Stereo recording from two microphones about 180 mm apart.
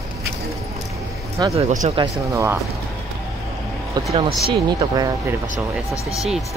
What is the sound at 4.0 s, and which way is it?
Speech, 20° right (ahead or behind).